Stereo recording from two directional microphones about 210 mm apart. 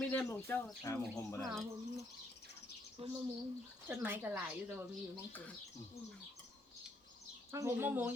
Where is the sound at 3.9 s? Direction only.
10° right (ahead or behind).